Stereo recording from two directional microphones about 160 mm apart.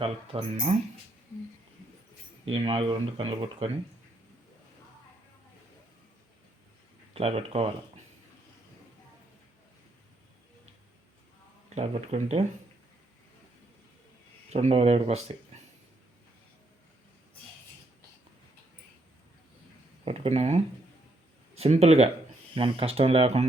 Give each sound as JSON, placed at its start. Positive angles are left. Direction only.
{"t": 0.0, "sound": "speech", "side_deg": -35}
{"t": 2.4, "sound": "speech", "side_deg": -35}
{"t": 7.1, "sound": "speech", "side_deg": -40}
{"t": 11.7, "sound": "speech", "side_deg": -45}
{"t": 14.5, "sound": "speech", "side_deg": -40}
{"t": 20.1, "sound": "speech", "side_deg": -40}